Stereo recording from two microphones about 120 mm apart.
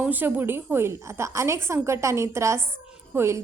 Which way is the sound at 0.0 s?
15° right (ahead or behind).